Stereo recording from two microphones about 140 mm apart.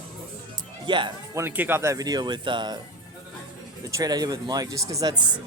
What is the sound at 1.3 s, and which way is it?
Speech, 15° right (ahead or behind).